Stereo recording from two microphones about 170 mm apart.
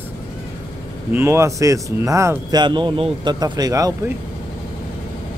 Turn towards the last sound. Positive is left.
turn(degrees=-20)  # may be behind; listen again after turning